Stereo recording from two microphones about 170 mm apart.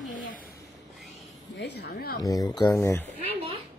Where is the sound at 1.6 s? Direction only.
90° left.